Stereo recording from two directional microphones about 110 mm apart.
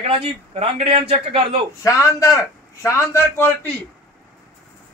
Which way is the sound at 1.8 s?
30° left (ahead or behind).